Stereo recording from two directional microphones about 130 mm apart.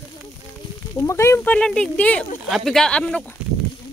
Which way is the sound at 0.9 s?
20° left (ahead or behind).